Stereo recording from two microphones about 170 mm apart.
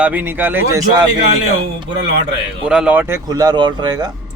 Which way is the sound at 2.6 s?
5° right (ahead or behind).